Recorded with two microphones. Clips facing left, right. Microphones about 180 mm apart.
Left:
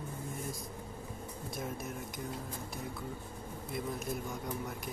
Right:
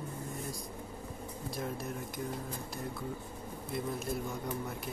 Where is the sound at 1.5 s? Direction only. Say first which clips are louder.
Right 2 dB; centre (ahead or behind).